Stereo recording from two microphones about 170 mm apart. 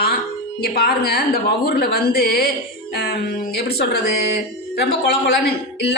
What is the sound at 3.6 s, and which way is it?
Speech, 65° left (ahead or behind).